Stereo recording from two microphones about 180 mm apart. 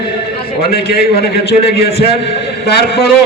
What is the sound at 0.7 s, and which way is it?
A man's voice, 65° left (ahead or behind).